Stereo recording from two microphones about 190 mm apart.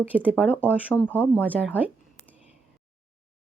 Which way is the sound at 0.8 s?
10° left (ahead or behind).